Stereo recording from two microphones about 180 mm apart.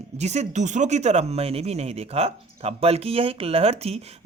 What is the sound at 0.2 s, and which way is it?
Speech, 40° right (ahead or behind).